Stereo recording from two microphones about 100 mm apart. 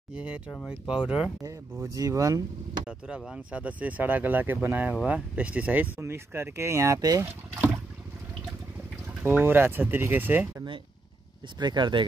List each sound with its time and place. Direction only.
0.1 s speech: 10° right (ahead or behind)
1.4 s speech: 35° right (ahead or behind)
3.3 s speech: 15° right (ahead or behind); by 7.2 s 35° right (ahead or behind)
9.2 s speech: 20° right (ahead or behind)
11.6 s speech: 50° right (ahead or behind)